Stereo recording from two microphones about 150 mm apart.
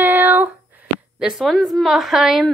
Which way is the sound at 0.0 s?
15° right (ahead or behind).